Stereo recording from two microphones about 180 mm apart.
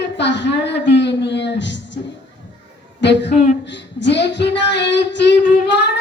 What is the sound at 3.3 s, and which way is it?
Speech, 45° left (ahead or behind).